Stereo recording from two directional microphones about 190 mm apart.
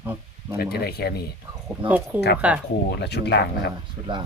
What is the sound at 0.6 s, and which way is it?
Speech, 55° left (ahead or behind).